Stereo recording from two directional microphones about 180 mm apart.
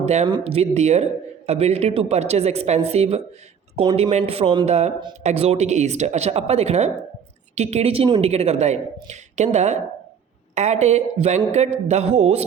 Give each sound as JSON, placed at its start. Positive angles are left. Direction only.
{"t": 0.0, "sound": "speech", "side_deg": -40}